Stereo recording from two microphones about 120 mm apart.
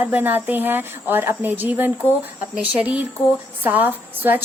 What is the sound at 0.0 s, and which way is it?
A woman's voice, 15° right (ahead or behind).